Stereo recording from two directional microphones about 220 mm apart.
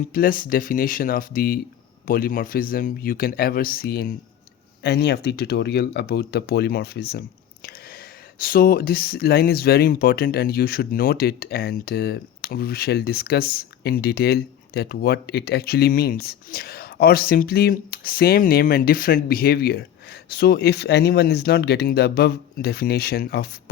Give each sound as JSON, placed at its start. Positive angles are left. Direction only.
{"t": 0.1, "sound": "a man's voice", "side_deg": 40}
{"t": 8.4, "sound": "speech", "side_deg": 40}